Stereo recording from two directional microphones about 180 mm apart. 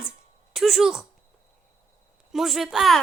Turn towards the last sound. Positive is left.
turn(degrees=0)  # may be behind; listen again after turning